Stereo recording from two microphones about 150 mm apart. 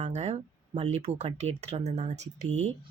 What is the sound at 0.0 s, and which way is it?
Speech, 45° right (ahead or behind).